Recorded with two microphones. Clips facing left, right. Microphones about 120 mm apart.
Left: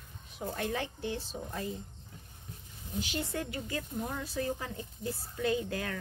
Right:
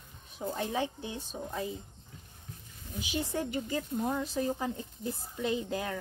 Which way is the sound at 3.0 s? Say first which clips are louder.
Right 2 dB; 15° right (ahead or behind).